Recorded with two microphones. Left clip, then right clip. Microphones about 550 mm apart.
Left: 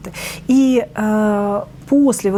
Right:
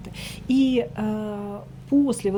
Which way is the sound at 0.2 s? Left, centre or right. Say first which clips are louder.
Left 7 dB; left.